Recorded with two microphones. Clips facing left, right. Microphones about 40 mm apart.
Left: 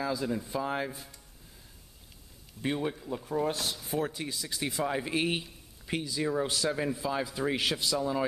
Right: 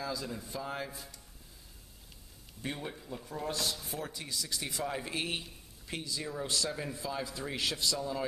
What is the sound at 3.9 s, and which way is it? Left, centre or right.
Speech, left.